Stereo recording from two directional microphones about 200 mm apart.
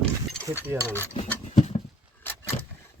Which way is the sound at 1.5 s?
35° left (ahead or behind).